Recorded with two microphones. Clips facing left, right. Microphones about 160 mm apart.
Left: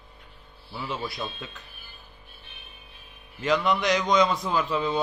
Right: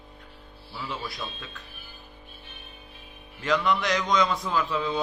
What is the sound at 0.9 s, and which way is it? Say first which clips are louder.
Speech: left 3 dB; 25° left (ahead or behind).